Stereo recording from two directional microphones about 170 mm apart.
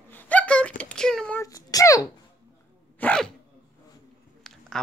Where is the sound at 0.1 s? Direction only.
10° left (ahead or behind).